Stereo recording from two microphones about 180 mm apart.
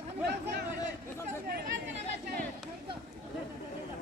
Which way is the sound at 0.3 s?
65° right (ahead or behind).